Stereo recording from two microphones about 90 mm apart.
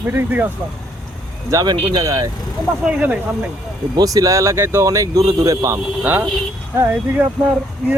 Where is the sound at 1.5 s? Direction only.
50° right (ahead or behind).